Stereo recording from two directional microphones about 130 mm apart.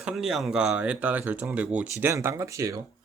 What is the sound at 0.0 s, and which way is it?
Speech, 5° right (ahead or behind).